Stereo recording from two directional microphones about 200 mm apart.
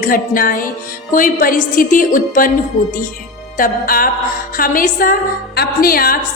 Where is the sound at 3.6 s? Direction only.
45° left (ahead or behind).